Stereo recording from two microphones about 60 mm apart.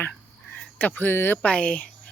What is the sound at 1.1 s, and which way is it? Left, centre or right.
Speech, left.